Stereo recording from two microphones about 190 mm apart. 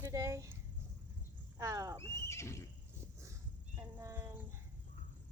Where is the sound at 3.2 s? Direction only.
15° right (ahead or behind).